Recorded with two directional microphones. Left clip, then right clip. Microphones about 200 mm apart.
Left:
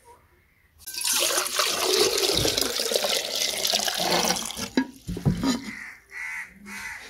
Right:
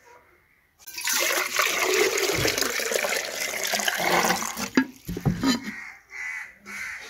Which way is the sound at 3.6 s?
10° right (ahead or behind).